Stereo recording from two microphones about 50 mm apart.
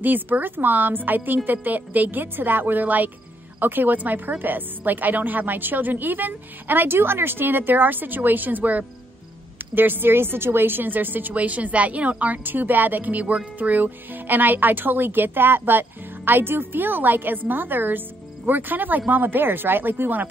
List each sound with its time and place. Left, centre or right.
0.0 s speech: right